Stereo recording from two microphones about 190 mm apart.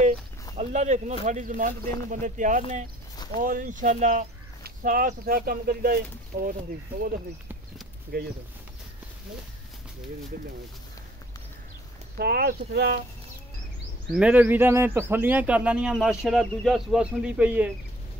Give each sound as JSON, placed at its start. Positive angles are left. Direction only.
{"t": 0.6, "sound": "speech", "side_deg": -40}
{"t": 8.1, "sound": "speech", "side_deg": -55}
{"t": 12.2, "sound": "speech", "side_deg": -55}
{"t": 14.1, "sound": "speech", "side_deg": -5}